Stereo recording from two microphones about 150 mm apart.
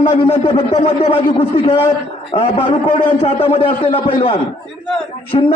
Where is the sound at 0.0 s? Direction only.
35° left (ahead or behind).